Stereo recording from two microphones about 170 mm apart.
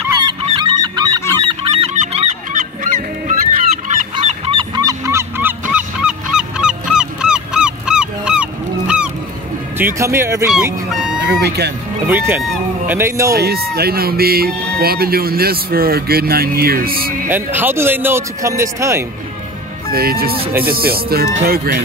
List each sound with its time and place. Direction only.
0.5 s goose: 30° right (ahead or behind)
2.0 s goose: 40° right (ahead or behind)
4.5 s honk: 25° right (ahead or behind); by 9.1 s 5° right (ahead or behind)
9.8 s speech: 15° right (ahead or behind)
10.5 s fowl: 5° right (ahead or behind)
11.2 s speech: 70° right (ahead or behind)
12.1 s speech: 10° right (ahead or behind)
12.9 s speech: 15° right (ahead or behind)
13.3 s speech: 65° right (ahead or behind)
17.3 s speech: 10° right (ahead or behind)
19.9 s speech: 65° right (ahead or behind)